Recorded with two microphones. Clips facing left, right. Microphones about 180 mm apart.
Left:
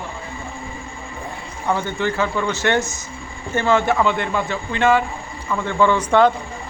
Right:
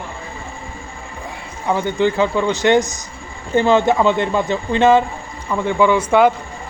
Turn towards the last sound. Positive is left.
turn(degrees=-10)  # may be behind; listen again after turning